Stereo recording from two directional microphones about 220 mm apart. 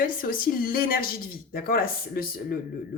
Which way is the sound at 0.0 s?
40° left (ahead or behind).